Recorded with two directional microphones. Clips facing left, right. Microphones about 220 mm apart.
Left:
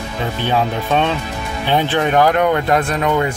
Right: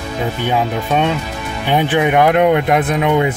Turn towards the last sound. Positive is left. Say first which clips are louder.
# right 2 dB
turn(degrees=-15)  # may be behind; listen again after turning